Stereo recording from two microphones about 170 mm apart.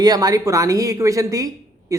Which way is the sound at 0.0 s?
20° right (ahead or behind).